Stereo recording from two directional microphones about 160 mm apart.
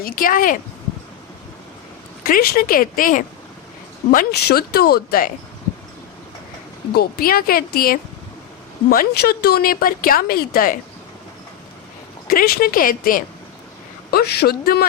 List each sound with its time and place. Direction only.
0.0 s speech: 60° left (ahead or behind)
2.2 s a woman's voice: 70° left (ahead or behind)
6.9 s a woman's voice: 70° left (ahead or behind)
12.3 s speech: 65° left (ahead or behind)
14.1 s a woman's voice: 80° left